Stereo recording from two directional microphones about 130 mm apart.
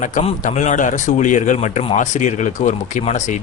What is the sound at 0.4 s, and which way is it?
A man's voice, 75° left (ahead or behind).